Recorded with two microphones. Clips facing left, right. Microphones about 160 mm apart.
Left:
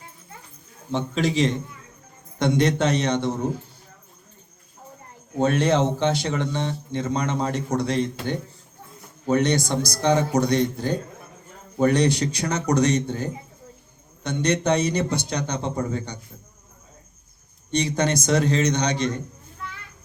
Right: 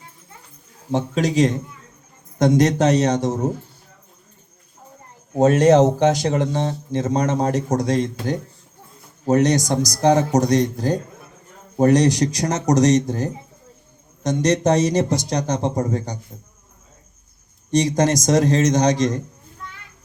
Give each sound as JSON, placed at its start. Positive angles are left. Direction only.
{"t": 0.9, "sound": "speech", "side_deg": -45}
{"t": 5.4, "sound": "speech", "side_deg": -40}
{"t": 17.7, "sound": "speech", "side_deg": -40}